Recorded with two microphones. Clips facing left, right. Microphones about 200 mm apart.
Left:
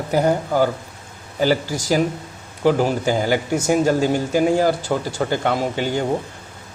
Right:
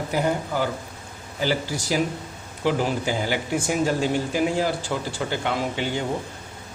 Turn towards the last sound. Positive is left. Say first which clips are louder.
# left 4 dB
turn(degrees=45)  # may be behind; listen again after turning